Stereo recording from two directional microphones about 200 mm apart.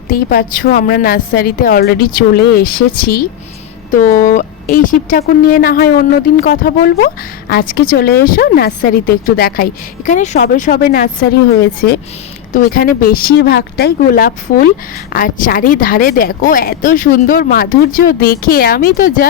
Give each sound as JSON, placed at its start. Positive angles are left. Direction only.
{"t": 0.1, "sound": "speech", "side_deg": 45}
{"t": 10.1, "sound": "speech", "side_deg": 35}